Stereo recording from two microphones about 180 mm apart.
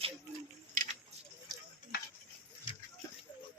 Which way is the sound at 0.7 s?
45° right (ahead or behind).